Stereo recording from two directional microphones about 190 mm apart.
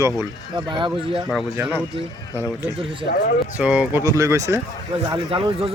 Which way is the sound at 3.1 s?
60° left (ahead or behind).